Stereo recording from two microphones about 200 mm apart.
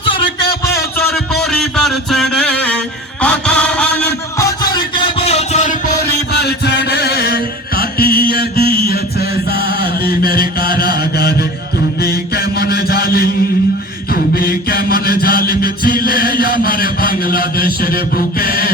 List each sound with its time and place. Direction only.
0.1 s a sound: 25° left (ahead or behind)
0.6 s music: 15° left (ahead or behind)
1.1 s music: centre (ahead or behind); by 5.7 s 35° left (ahead or behind)
6.0 s chant: 55° left (ahead or behind)
8.6 s mantra: 30° right (ahead or behind)
9.5 s chant: 55° left (ahead or behind)
10.0 s mantra: 50° left (ahead or behind)